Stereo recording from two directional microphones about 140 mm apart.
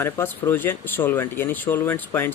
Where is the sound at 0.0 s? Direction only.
15° left (ahead or behind).